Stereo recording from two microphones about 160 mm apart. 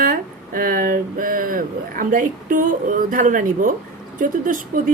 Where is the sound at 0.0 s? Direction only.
60° right (ahead or behind).